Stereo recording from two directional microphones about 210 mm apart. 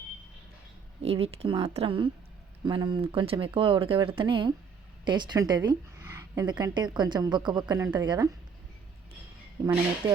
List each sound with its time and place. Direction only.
1.0 s a woman's voice: 30° right (ahead or behind)